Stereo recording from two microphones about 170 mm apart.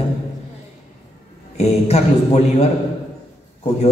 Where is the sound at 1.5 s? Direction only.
40° left (ahead or behind).